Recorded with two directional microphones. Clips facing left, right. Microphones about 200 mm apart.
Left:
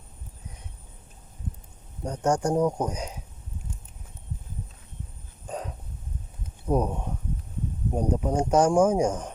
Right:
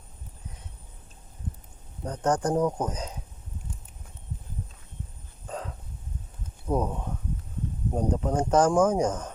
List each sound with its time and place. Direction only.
2.0 s speech: 10° left (ahead or behind)
5.5 s hiccup: 15° left (ahead or behind)
6.7 s speech: 15° left (ahead or behind)